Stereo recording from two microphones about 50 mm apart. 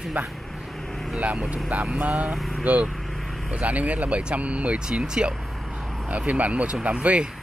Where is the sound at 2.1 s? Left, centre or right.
Centre.